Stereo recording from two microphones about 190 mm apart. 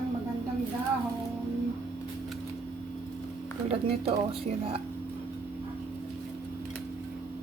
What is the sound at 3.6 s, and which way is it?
Speech, 30° right (ahead or behind).